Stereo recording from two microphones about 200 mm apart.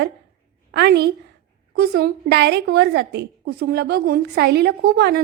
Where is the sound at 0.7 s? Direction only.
60° right (ahead or behind).